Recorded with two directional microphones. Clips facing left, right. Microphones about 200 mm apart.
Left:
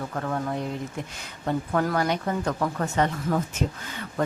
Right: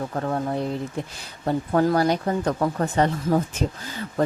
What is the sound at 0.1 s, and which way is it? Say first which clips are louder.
Speech: right 3 dB; 30° right (ahead or behind).